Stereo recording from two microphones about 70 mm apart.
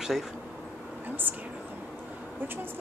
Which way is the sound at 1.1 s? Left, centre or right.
Right.